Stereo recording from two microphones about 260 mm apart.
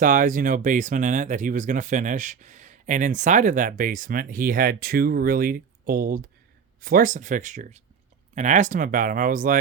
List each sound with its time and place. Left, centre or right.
0.0 s speech: right